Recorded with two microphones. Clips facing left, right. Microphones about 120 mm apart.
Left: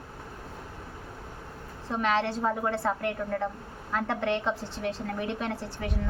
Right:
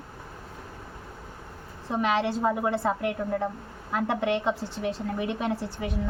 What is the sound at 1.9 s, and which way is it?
A woman's voice, 15° right (ahead or behind).